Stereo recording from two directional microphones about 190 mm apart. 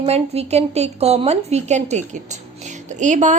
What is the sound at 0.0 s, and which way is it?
A woman's voice, 35° right (ahead or behind).